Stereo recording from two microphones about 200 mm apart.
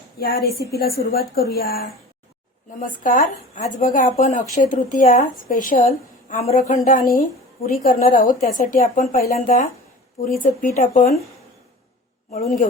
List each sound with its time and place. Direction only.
0.2 s a woman's voice: 50° left (ahead or behind)
3.0 s a woman's voice: 40° left (ahead or behind)